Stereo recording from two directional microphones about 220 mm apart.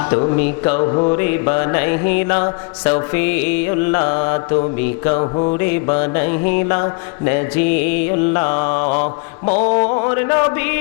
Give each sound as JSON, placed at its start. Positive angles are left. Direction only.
{"t": 0.1, "sound": "mantra", "side_deg": 25}
{"t": 3.7, "sound": "mantra", "side_deg": 25}
{"t": 7.3, "sound": "mantra", "side_deg": 15}